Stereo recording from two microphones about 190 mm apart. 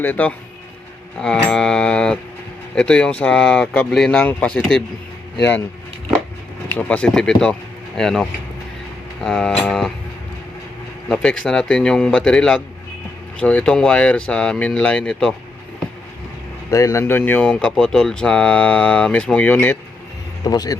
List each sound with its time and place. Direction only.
0.0 s speech: 10° left (ahead or behind)
1.5 s speech: 5° left (ahead or behind)
6.7 s speech: 5° left (ahead or behind)
11.1 s speech: 5° left (ahead or behind)
16.7 s speech: 15° left (ahead or behind)
20.4 s speech: 20° left (ahead or behind)